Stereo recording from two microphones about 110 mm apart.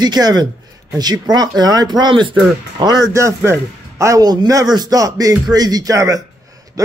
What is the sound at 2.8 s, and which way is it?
A man's voice, 30° right (ahead or behind).